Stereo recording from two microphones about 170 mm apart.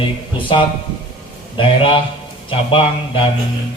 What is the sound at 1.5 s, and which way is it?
Speech, 30° left (ahead or behind).